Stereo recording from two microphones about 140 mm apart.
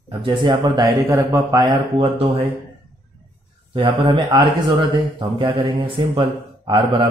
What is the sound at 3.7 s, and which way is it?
Speech, 35° right (ahead or behind).